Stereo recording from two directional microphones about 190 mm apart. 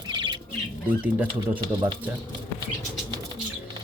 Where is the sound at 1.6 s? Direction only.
25° right (ahead or behind).